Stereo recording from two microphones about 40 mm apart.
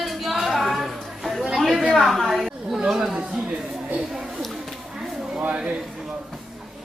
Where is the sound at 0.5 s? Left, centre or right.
Centre.